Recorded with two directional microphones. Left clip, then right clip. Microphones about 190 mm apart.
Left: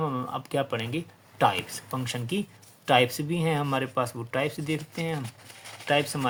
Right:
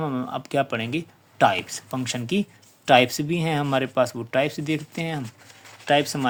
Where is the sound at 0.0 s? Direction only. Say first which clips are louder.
Right 2 dB; 40° right (ahead or behind).